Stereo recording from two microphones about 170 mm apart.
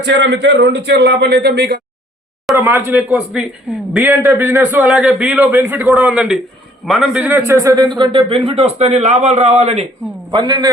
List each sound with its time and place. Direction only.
0.0 s a man's voice: 90° right; by 1.8 s 70° right (ahead or behind)
2.6 s a man's voice: 15° right (ahead or behind); by 9.8 s 40° right (ahead or behind)
10.3 s a man's voice: 25° right (ahead or behind)